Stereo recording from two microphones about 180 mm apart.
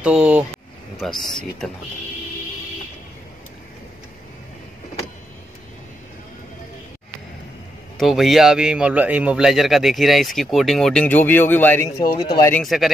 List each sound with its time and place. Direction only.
0.0 s a man's voice: 5° right (ahead or behind)
8.0 s a man's voice: centre (ahead or behind); by 12.5 s 20° left (ahead or behind)
12.5 s a man's voice: centre (ahead or behind)